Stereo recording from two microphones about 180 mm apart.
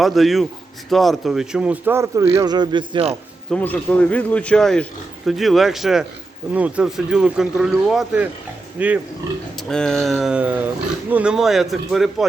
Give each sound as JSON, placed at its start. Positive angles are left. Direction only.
{"t": 0.0, "sound": "speech", "side_deg": 0}
{"t": 3.5, "sound": "speech", "side_deg": 10}
{"t": 9.6, "sound": "speech", "side_deg": 5}